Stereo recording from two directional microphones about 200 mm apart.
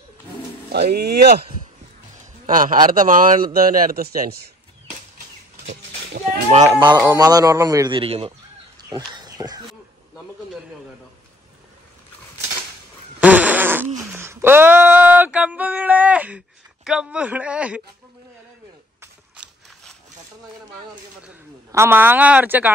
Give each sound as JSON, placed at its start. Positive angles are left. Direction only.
{"t": 0.7, "sound": "speech", "side_deg": -50}
{"t": 2.1, "sound": "a sound", "side_deg": -40}
{"t": 2.9, "sound": "speech", "side_deg": -40}
{"t": 6.1, "sound": "a sound", "side_deg": -45}
{"t": 6.7, "sound": "a man's voice", "side_deg": -20}
{"t": 13.2, "sound": "fart", "side_deg": -5}
{"t": 13.9, "sound": "female singing", "side_deg": -15}
{"t": 18.9, "sound": "a sound", "side_deg": -5}
{"t": 21.7, "sound": "speech", "side_deg": -10}